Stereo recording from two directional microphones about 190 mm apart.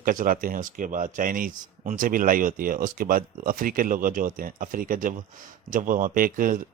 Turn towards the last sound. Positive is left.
turn(degrees=-45)  # may be behind; listen again after turning